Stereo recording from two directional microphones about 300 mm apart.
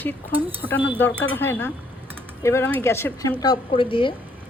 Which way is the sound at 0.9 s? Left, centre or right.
Centre.